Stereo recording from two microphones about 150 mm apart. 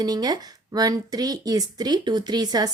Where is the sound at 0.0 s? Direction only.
25° right (ahead or behind).